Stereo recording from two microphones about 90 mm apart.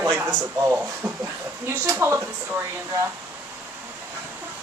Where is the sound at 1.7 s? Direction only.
25° right (ahead or behind).